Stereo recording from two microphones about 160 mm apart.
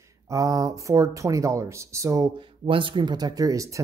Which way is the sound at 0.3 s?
20° right (ahead or behind).